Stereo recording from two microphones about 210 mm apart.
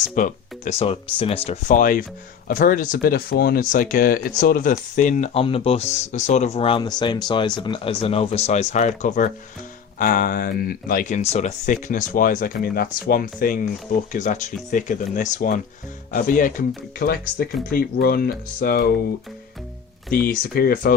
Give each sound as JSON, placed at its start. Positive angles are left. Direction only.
{"t": 0.2, "sound": "speech", "side_deg": 35}
{"t": 20.1, "sound": "speech", "side_deg": 45}